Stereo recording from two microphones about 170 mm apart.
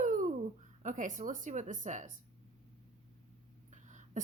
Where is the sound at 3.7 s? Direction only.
45° right (ahead or behind).